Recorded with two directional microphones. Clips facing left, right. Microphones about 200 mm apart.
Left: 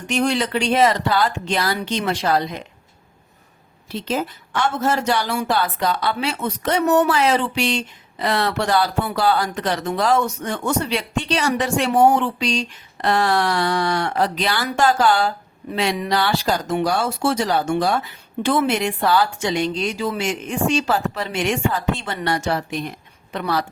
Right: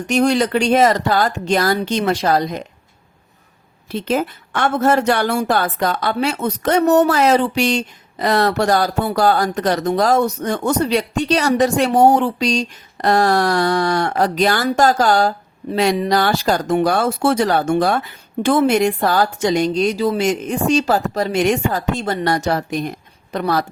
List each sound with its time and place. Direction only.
0.1 s speech: 40° right (ahead or behind)
3.8 s a woman's voice: 55° right (ahead or behind)